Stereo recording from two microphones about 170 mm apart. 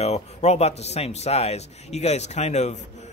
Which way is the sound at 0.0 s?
40° left (ahead or behind).